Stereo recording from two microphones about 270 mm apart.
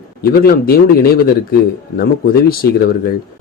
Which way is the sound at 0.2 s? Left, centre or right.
Left.